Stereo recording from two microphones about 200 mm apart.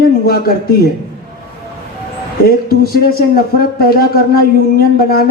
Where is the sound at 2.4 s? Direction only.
50° left (ahead or behind).